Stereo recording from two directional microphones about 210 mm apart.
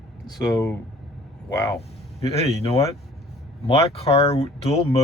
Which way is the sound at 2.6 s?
30° left (ahead or behind).